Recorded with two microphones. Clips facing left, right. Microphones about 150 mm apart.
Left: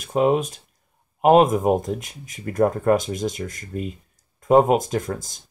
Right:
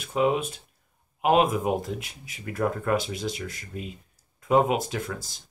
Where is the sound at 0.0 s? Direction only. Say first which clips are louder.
Left 5 dB; 45° left (ahead or behind).